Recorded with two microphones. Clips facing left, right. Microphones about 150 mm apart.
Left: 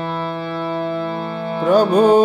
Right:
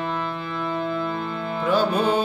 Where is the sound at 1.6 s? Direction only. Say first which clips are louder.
Left 8 dB; 40° left (ahead or behind).